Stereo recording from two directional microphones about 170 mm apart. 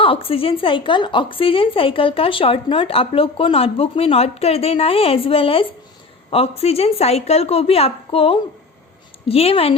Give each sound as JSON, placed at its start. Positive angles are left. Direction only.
{"t": 0.0, "sound": "speech", "side_deg": 30}